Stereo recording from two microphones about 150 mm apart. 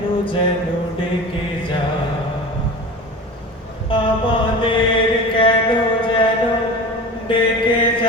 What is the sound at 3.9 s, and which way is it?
Mantra, 35° left (ahead or behind).